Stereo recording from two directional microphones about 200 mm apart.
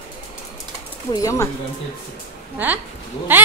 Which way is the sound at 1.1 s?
15° left (ahead or behind).